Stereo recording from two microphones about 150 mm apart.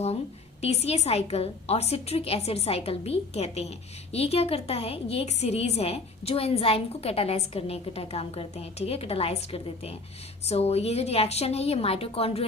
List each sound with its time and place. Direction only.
0.6 s a woman's voice: 45° left (ahead or behind)